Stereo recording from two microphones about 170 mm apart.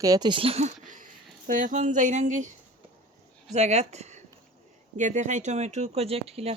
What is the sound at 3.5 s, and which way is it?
Speech, 40° right (ahead or behind).